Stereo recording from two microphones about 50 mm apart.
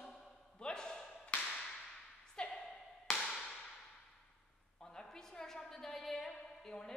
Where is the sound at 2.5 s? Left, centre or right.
Centre.